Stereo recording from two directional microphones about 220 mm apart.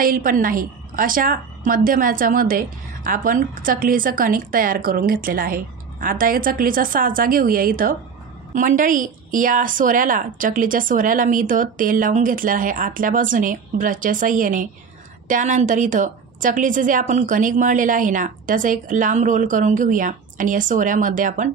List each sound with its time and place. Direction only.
0.0 s a woman's voice: 40° right (ahead or behind)